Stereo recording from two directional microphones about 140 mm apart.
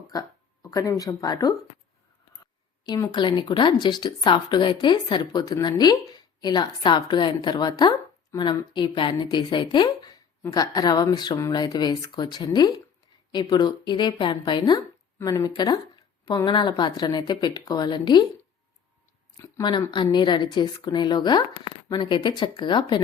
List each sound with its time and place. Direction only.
0.1 s speech: 25° left (ahead or behind)
2.8 s speech: 30° left (ahead or behind)
19.4 s speech: 30° left (ahead or behind)